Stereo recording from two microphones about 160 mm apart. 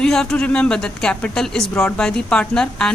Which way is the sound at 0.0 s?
5° left (ahead or behind).